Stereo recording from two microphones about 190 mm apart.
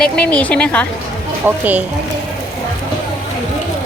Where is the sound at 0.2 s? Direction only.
5° left (ahead or behind).